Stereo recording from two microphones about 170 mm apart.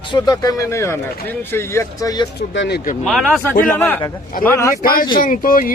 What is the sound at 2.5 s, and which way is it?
Speech, 80° left.